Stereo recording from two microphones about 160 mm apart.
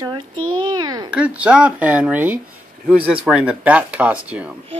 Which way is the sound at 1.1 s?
5° right (ahead or behind).